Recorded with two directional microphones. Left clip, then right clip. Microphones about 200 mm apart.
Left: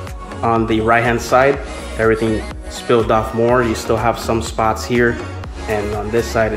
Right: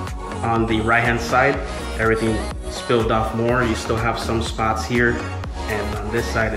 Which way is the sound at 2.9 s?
25° left (ahead or behind).